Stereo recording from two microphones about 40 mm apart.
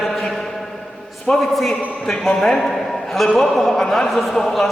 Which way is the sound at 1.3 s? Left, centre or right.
Left.